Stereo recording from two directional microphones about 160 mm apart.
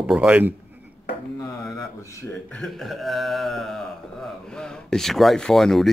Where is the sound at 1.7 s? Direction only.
20° left (ahead or behind).